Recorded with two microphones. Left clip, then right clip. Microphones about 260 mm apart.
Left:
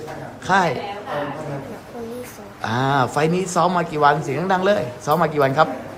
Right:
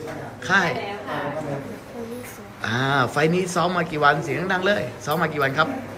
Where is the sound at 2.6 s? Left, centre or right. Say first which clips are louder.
Left 2 dB; centre.